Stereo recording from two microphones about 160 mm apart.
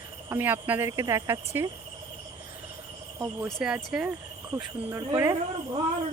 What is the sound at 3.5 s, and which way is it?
A woman's voice, centre (ahead or behind).